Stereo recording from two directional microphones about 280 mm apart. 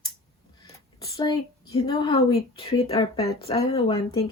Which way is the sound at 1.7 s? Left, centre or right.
Centre.